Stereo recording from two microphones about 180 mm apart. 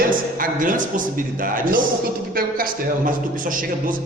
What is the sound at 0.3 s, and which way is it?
Speech, 50° right (ahead or behind).